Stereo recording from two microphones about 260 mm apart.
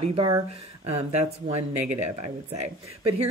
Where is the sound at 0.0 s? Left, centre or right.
Right.